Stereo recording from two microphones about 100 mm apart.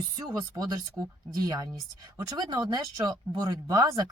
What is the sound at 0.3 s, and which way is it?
A woman's voice, 40° right (ahead or behind).